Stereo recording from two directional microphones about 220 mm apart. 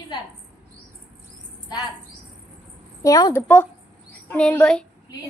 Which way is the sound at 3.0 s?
15° left (ahead or behind).